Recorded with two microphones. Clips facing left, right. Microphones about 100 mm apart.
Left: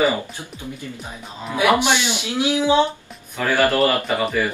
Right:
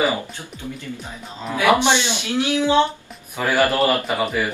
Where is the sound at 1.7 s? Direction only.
20° right (ahead or behind).